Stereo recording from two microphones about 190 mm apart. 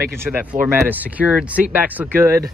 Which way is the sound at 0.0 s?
15° right (ahead or behind).